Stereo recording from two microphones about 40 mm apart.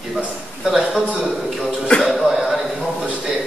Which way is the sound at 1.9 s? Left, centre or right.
Left.